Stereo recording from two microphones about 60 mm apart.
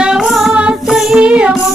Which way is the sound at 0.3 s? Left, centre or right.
Centre.